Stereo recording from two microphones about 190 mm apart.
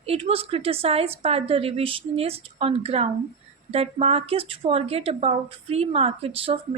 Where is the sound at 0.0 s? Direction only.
30° right (ahead or behind).